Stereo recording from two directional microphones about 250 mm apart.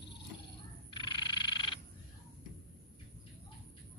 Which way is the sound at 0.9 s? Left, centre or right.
Centre.